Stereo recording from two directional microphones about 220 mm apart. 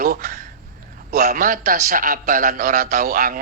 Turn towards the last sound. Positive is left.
turn(degrees=-40)  # may be behind; listen again after turning